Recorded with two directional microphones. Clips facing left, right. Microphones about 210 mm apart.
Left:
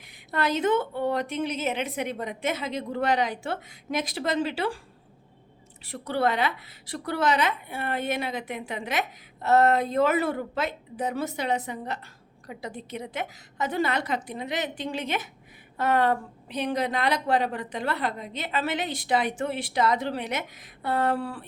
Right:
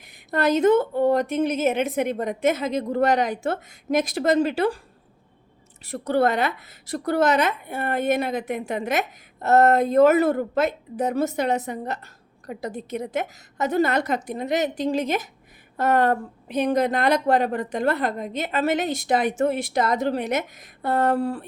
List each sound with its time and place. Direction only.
0.0 s a woman's voice: 45° right (ahead or behind)
5.8 s a woman's voice: 45° right (ahead or behind)